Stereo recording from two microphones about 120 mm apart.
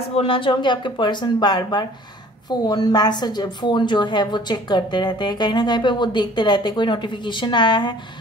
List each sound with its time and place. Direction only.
0.1 s a woman's voice: 50° left (ahead or behind)